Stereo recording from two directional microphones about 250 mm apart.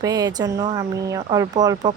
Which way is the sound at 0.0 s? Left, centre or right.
Centre.